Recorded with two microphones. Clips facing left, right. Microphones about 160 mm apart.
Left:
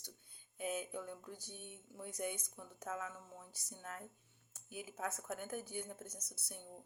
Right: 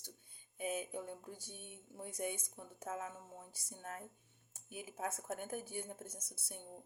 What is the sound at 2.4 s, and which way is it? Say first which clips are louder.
Speech: right 1 dB; 25° right (ahead or behind).